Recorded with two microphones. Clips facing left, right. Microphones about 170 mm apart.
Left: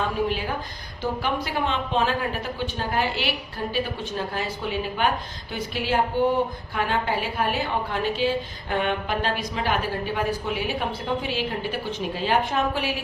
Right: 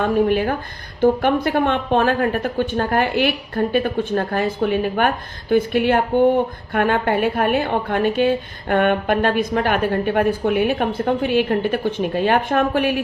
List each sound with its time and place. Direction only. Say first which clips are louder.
0.0 s a woman's voice: right 8 dB; 55° right (ahead or behind)